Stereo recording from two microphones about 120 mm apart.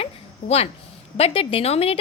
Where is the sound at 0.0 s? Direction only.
55° left (ahead or behind).